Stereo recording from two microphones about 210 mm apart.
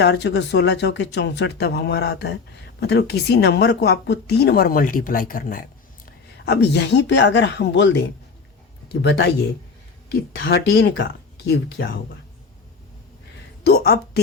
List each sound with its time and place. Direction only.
0.0 s a woman's voice: 55° left (ahead or behind)
10.3 s speech: 55° left (ahead or behind)
13.7 s speech: 50° left (ahead or behind)